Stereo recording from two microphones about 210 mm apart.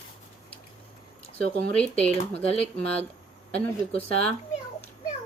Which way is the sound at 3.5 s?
5° left (ahead or behind).